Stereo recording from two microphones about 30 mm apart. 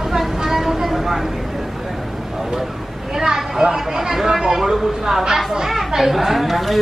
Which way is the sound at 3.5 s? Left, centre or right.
Centre.